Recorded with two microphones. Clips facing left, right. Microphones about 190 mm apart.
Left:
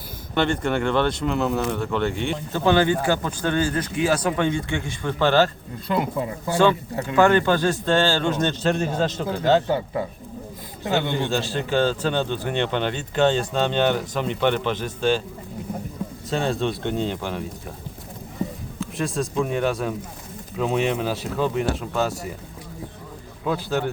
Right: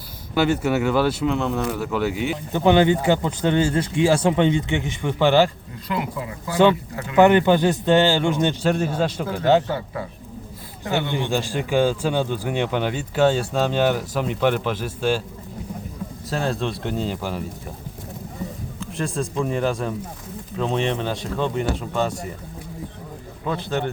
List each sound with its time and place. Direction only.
0.3 s speech: 5° right (ahead or behind)
2.5 s speech: 20° right (ahead or behind)
5.9 s speech: 30° left (ahead or behind)
7.2 s speech: 20° right (ahead or behind)
9.6 s speech: 25° left (ahead or behind)
11.1 s speech: 15° right (ahead or behind)
16.3 s speech: centre (ahead or behind)
18.8 s speech: centre (ahead or behind)
23.5 s speech: 5° left (ahead or behind)